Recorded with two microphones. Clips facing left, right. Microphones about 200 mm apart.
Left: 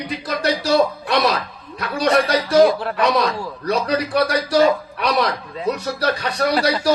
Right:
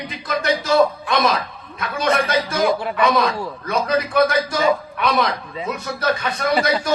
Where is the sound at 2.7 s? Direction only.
Centre (ahead or behind).